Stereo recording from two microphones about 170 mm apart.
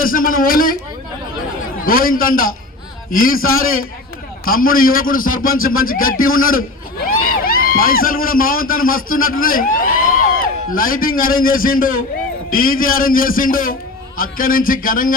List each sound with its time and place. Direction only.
0.0 s a man's voice: 55° left (ahead or behind)
1.8 s a man's voice: 55° left (ahead or behind)